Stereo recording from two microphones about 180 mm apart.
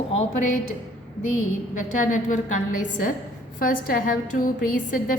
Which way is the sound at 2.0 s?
45° left (ahead or behind).